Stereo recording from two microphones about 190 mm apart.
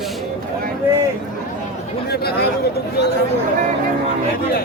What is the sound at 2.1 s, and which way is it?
Speech, 55° left (ahead or behind).